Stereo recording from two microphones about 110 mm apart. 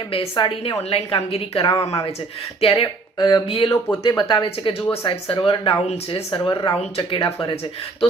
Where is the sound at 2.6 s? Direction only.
55° left (ahead or behind).